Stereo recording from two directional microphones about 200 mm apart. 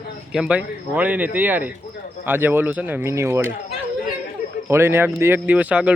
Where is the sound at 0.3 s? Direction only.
5° right (ahead or behind).